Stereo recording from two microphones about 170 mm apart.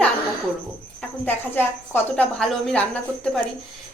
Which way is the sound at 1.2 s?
10° left (ahead or behind).